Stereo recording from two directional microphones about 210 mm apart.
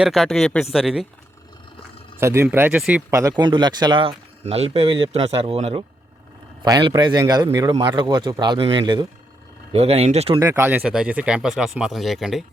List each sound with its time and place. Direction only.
0.0 s speech: centre (ahead or behind)
2.1 s speech: 10° right (ahead or behind); by 5.8 s 30° right (ahead or behind)
6.6 s speech: 20° right (ahead or behind)
10.4 s speech: 10° right (ahead or behind)